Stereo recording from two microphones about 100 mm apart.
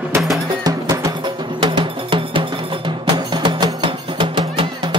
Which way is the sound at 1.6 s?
55° right (ahead or behind).